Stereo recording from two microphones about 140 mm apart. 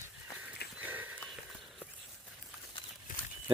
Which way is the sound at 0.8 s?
15° right (ahead or behind).